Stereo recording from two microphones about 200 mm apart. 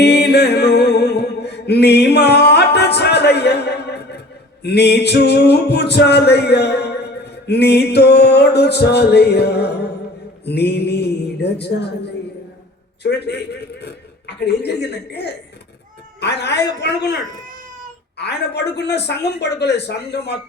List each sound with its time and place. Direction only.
0.0 s music: 55° left (ahead or behind)
4.6 s a man's voice: 55° left (ahead or behind)
13.0 s a man's voice: 55° left (ahead or behind)
18.2 s a man's voice: 55° left (ahead or behind)